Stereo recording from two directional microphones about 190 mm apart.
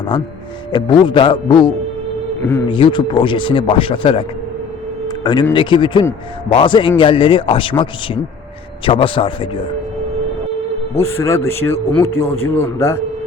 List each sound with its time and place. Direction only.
0.7 s speech: 25° left (ahead or behind)
2.4 s speech: 10° left (ahead or behind)
2.6 s speech: 25° left (ahead or behind)
5.0 s a sound: 20° left (ahead or behind)
5.5 s speech: 25° left (ahead or behind)
10.9 s speech: 15° left (ahead or behind)